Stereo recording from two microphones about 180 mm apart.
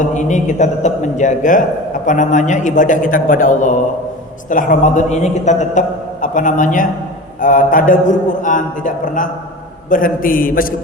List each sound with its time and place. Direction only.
0.0 s a man's voice: 40° left (ahead or behind)